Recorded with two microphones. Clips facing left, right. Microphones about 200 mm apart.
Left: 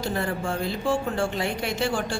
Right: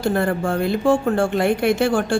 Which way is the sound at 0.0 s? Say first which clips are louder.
Right 7 dB; 55° right (ahead or behind).